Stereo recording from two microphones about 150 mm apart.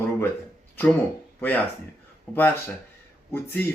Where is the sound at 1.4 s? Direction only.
10° left (ahead or behind).